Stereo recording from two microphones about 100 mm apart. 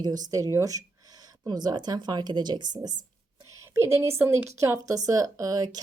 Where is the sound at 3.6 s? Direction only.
25° right (ahead or behind).